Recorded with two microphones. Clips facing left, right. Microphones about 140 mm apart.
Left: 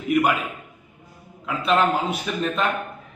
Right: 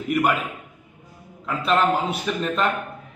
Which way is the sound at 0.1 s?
Centre (ahead or behind).